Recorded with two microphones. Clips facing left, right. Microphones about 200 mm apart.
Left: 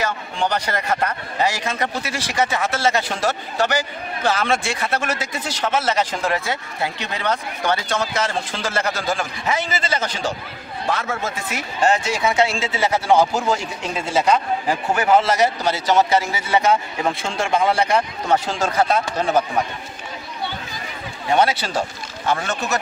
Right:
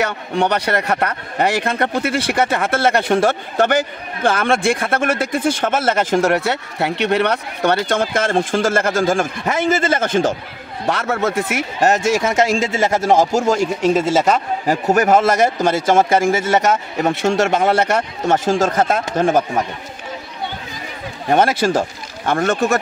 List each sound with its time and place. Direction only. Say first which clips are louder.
0.0 s a man's voice: right 5 dB; 65° right (ahead or behind)
6.2 s speech: right 6 dB; 70° right (ahead or behind); by 10.3 s 50° right (ahead or behind)
10.9 s a man's voice: right 6 dB; 70° right (ahead or behind)
11.8 s speech: right 3 dB; 45° right (ahead or behind)
17.1 s a man's voice: right 7 dB; 75° right (ahead or behind)
17.9 s speech: right 2 dB; 45° right (ahead or behind)
21.3 s speech: right 4 dB; 50° right (ahead or behind)